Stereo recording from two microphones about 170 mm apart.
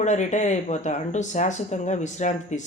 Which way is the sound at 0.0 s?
45° left (ahead or behind).